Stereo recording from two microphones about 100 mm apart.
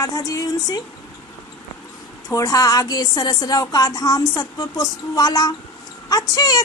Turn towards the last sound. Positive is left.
turn(degrees=40)  # may be behind; listen again after turning